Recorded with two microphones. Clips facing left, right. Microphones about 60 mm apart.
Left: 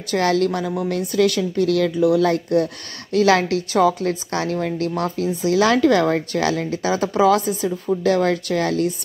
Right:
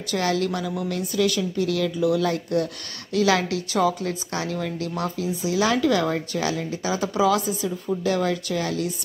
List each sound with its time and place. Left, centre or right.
0.1 s a woman's voice: left